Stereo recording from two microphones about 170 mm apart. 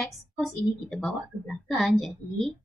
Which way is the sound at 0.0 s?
Centre (ahead or behind).